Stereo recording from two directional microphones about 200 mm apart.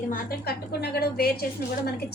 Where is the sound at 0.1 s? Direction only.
50° left (ahead or behind).